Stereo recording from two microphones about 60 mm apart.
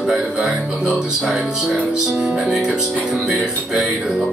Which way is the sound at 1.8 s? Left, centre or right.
Centre.